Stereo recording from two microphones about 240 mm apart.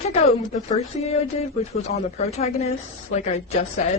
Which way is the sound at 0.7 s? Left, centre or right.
Left.